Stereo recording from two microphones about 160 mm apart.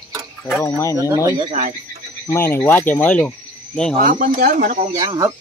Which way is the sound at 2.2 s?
15° left (ahead or behind).